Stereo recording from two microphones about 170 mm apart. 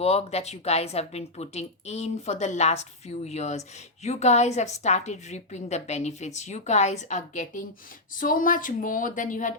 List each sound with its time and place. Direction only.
0.0 s a woman's voice: 40° left (ahead or behind)